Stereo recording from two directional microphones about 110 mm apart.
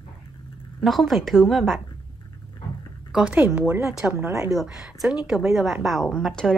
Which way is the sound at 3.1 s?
10° right (ahead or behind).